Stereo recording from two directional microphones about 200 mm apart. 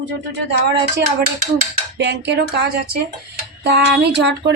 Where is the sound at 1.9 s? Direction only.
60° right (ahead or behind).